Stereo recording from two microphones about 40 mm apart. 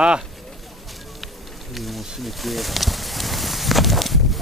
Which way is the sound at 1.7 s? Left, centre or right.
Centre.